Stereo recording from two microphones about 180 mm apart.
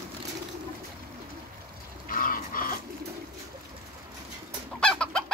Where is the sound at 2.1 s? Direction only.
50° left (ahead or behind).